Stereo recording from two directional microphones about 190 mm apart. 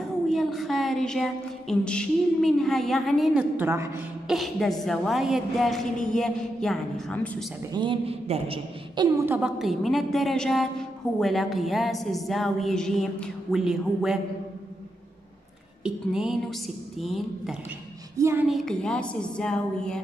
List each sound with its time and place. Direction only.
0.3 s a woman's voice: centre (ahead or behind)
4.3 s a woman's voice: centre (ahead or behind)
7.7 s a man's voice: 25° right (ahead or behind)
9.2 s a woman's voice: 10° right (ahead or behind)
9.6 s a woman's voice: centre (ahead or behind)
15.8 s a woman's voice: 5° right (ahead or behind)
18.1 s speech: 15° right (ahead or behind)
18.5 s a woman's voice: centre (ahead or behind)